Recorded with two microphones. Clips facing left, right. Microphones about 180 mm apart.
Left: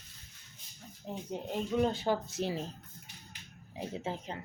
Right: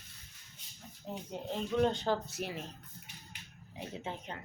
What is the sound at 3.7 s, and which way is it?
Speech, 35° left (ahead or behind).